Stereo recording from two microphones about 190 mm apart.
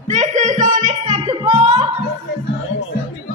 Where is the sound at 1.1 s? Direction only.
25° right (ahead or behind).